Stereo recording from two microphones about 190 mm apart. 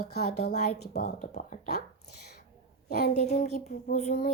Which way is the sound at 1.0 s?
40° left (ahead or behind).